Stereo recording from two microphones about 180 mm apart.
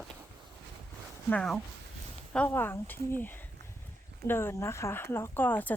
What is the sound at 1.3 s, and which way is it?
Speech, 5° left (ahead or behind).